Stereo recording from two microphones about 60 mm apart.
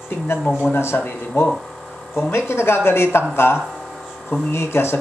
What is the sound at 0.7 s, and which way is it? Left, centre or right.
Speech, left.